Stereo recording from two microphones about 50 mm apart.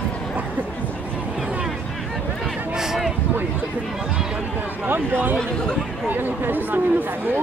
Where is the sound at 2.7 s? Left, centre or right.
Centre.